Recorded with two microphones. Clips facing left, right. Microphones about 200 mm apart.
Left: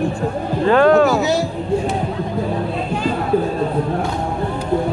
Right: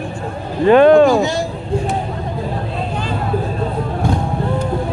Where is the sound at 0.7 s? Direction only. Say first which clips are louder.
Right 4 dB; 20° right (ahead or behind).